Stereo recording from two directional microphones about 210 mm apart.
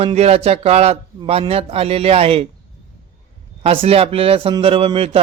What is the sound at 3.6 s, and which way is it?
A man's voice, 30° right (ahead or behind).